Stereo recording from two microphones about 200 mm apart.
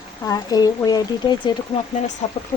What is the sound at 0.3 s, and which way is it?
Speech, 20° left (ahead or behind).